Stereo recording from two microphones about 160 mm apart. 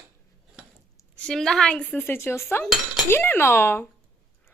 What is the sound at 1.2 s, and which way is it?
Speech, 5° left (ahead or behind).